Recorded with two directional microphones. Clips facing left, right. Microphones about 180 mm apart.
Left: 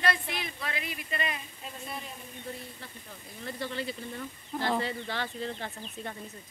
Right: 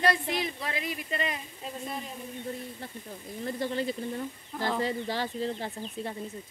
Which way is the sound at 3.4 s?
40° right (ahead or behind).